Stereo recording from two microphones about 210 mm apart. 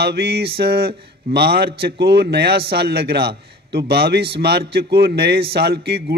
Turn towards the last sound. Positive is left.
turn(degrees=-50)  # may be behind; listen again after turning